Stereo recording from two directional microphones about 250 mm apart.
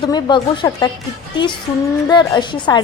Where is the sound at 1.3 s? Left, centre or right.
Centre.